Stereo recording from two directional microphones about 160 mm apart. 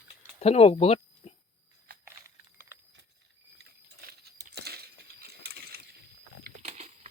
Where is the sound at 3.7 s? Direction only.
80° right.